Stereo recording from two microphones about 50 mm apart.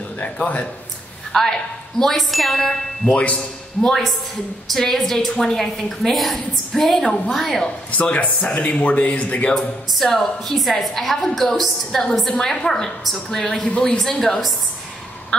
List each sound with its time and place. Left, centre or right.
0.2 s a man's voice: left
1.3 s a woman's voice: centre
3.1 s a man's voice: left
3.8 s a woman's voice: centre
7.9 s a man's voice: left
9.6 s a woman's voice: centre
13.6 s a man's voice: left
13.9 s a woman's voice: centre